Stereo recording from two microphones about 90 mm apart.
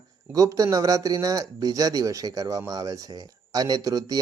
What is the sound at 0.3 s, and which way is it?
A man's voice, 40° right (ahead or behind).